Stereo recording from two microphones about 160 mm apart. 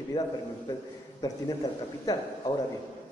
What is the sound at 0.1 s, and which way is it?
Speech, 35° left (ahead or behind).